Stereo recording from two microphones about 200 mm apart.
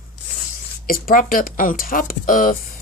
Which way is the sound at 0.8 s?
45° left (ahead or behind).